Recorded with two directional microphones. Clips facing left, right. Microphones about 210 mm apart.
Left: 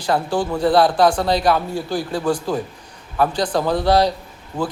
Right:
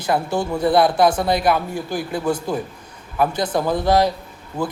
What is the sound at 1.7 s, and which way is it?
Speech, 20° right (ahead or behind).